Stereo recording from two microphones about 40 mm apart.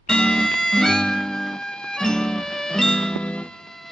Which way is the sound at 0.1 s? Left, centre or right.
Left.